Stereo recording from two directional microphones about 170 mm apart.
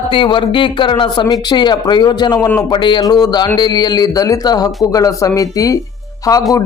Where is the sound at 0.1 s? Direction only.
30° left (ahead or behind).